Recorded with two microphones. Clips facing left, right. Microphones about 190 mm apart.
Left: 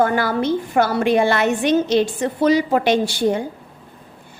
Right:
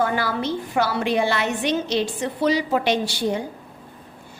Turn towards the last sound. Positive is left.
turn(degrees=50)  # may be behind; listen again after turning